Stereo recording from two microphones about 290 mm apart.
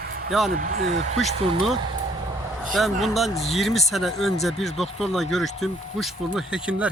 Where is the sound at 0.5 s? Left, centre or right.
Right.